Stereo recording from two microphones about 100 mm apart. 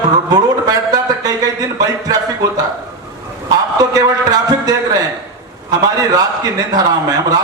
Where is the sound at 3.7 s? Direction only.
40° right (ahead or behind).